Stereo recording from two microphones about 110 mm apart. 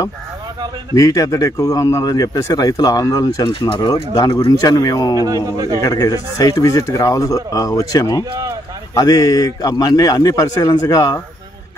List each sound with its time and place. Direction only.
0.9 s speech: 30° left (ahead or behind)
3.4 s speech: 50° left (ahead or behind)
3.9 s speech: 35° left (ahead or behind)
5.2 s a man's voice: 30° right (ahead or behind)
5.8 s speech: 35° left (ahead or behind)